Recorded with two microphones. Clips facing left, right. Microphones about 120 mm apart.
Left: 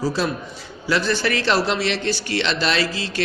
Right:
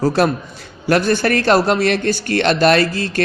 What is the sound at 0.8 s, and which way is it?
A man's voice, 50° right (ahead or behind).